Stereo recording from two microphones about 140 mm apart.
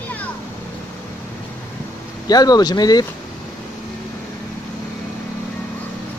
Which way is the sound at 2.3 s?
30° left (ahead or behind).